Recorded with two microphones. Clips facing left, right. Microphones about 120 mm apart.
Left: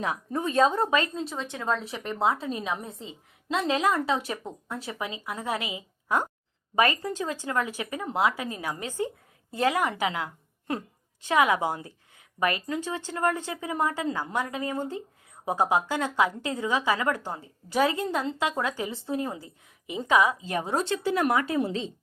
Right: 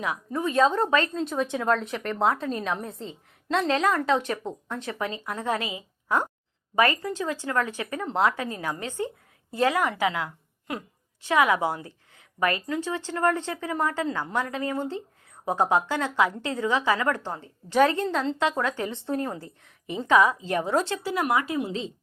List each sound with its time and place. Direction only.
0.0 s a woman's voice: 30° left (ahead or behind)
0.7 s a woman's voice: 15° left (ahead or behind)
1.4 s speech: 10° right (ahead or behind)
1.7 s a woman's voice: 5° left (ahead or behind)
21.4 s speech: 35° left (ahead or behind)